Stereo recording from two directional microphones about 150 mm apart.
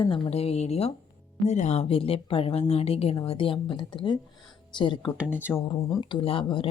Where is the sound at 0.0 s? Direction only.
40° left (ahead or behind).